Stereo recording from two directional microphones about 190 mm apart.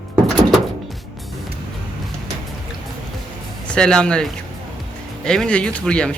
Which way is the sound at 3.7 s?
5° left (ahead or behind).